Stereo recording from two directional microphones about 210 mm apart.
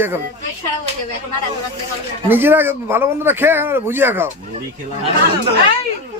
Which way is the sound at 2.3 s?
10° right (ahead or behind).